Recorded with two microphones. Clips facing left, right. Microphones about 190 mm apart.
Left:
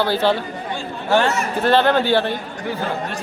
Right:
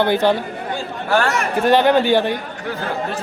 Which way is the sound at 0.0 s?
15° right (ahead or behind).